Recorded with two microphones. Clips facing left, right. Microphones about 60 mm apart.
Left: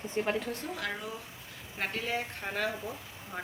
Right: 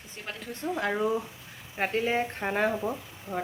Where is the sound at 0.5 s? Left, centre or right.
Right.